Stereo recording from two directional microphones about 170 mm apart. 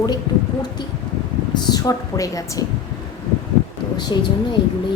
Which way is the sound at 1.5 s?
25° left (ahead or behind).